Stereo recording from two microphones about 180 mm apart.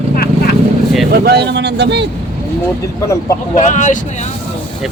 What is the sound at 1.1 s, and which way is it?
Speech, 65° right (ahead or behind).